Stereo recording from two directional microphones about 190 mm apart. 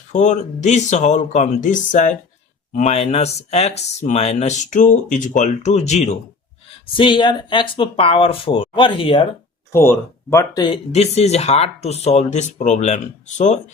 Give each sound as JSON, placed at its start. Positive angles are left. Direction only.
{"t": 0.1, "sound": "speech", "side_deg": 40}
{"t": 6.9, "sound": "speech", "side_deg": 25}
{"t": 9.7, "sound": "speech", "side_deg": 15}
{"t": 10.9, "sound": "speech", "side_deg": 35}